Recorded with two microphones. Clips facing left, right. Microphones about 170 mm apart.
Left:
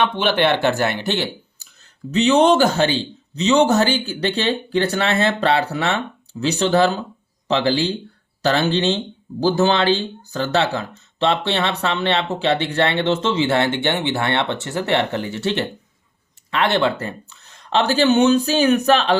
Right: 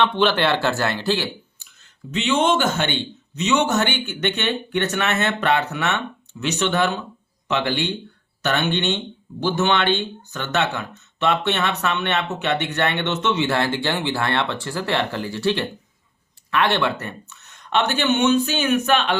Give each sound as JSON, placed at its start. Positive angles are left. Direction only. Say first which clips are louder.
{"t": 0.0, "sound": "speech", "louder": "left 1 dB", "side_deg": 15}
{"t": 2.0, "sound": "speech", "louder": "left 6 dB", "side_deg": 40}